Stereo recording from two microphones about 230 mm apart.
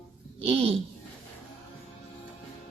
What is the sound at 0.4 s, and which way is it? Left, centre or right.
Speech, right.